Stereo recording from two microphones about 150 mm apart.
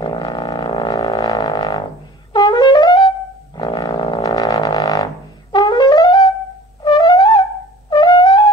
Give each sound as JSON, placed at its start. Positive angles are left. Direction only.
{"t": 0.0, "sound": "music", "side_deg": 30}
{"t": 2.3, "sound": "brass instrument", "side_deg": 30}
{"t": 3.5, "sound": "music", "side_deg": 30}
{"t": 6.8, "sound": "brass instrument", "side_deg": 30}